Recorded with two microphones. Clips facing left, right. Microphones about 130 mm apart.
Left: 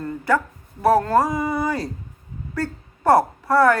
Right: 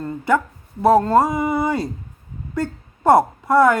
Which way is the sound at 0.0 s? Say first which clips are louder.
Right 2 dB; 25° right (ahead or behind).